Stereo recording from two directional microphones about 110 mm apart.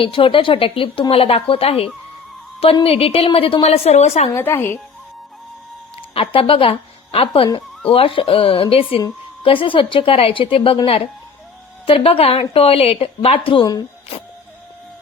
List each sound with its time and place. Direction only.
0.0 s a woman's voice: 50° left (ahead or behind); by 4.3 s 75° left (ahead or behind)
4.4 s a woman's voice: 25° left (ahead or behind)
6.0 s a woman's voice: 55° left (ahead or behind)